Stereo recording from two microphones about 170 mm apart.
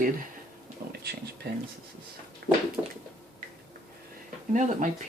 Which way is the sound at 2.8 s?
10° right (ahead or behind).